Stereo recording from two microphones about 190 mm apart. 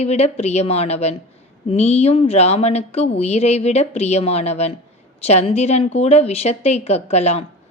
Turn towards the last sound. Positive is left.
turn(degrees=35)  # may be behind; listen again after turning